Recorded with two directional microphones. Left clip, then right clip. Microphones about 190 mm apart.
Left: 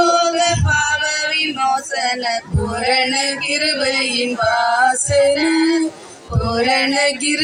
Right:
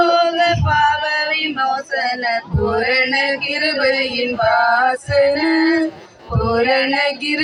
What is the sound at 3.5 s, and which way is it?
Music, 30° left (ahead or behind).